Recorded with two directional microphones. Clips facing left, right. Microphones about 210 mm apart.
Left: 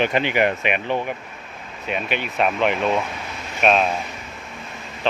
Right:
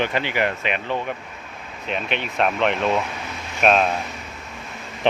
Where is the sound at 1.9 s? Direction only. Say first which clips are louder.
Left 1 dB; 5° left (ahead or behind).